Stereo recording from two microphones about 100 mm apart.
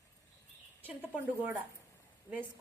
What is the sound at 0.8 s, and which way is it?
Speech, 15° right (ahead or behind).